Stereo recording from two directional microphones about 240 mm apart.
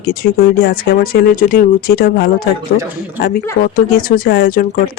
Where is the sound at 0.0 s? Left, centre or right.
Left.